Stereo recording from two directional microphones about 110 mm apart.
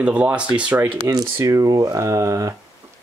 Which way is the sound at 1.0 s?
35° right (ahead or behind).